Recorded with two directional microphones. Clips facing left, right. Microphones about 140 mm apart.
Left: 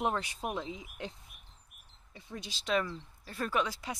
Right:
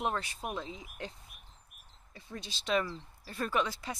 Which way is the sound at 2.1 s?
10° left (ahead or behind).